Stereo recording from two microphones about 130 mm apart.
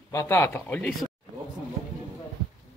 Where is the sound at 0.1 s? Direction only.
25° left (ahead or behind).